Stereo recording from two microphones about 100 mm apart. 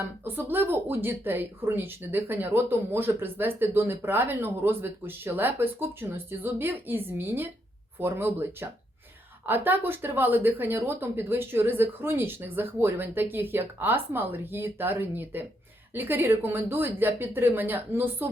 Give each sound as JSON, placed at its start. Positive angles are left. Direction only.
{"t": 0.0, "sound": "speech", "side_deg": -20}
{"t": 9.5, "sound": "speech", "side_deg": -20}